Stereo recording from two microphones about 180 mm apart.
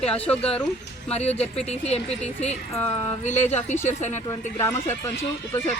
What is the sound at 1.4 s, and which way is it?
Speech, 35° left (ahead or behind).